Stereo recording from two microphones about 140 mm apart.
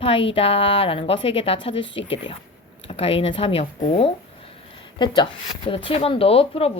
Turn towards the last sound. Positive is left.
turn(degrees=45)  # may be behind; listen again after turning